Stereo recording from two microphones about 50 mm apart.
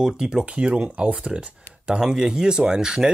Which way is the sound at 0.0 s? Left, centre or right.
Centre.